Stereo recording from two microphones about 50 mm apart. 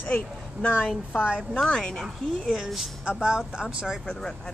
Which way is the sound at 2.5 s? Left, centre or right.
Centre.